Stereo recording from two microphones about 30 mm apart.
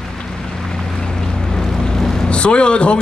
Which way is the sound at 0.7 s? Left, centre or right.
Left.